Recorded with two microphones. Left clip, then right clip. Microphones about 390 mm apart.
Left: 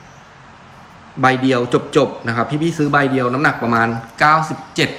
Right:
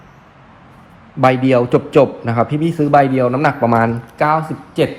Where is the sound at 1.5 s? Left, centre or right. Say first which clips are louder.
Right 3 dB; centre.